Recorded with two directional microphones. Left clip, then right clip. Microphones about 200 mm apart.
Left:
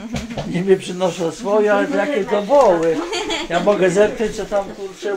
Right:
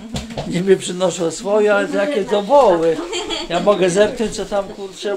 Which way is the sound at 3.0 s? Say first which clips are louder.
Left 1 dB; 50° left (ahead or behind).